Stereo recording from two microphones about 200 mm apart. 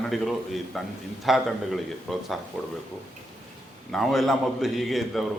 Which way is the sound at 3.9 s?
Centre (ahead or behind).